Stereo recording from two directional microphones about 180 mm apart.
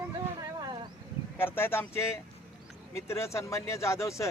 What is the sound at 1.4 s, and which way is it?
Speech, 10° left (ahead or behind).